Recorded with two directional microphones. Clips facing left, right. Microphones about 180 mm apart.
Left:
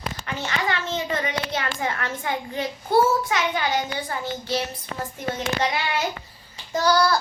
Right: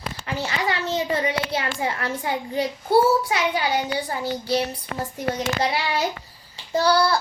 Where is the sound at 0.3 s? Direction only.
35° right (ahead or behind).